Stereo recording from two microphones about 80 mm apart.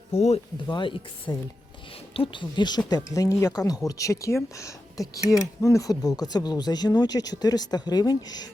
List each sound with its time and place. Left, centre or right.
0.7 s speech: left
1.3 s speech: left
2.2 s speech: left